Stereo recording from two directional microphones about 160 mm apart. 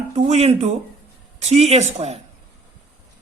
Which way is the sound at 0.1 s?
40° right (ahead or behind).